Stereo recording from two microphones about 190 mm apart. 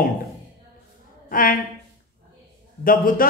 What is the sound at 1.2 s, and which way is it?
Speech, 45° left (ahead or behind).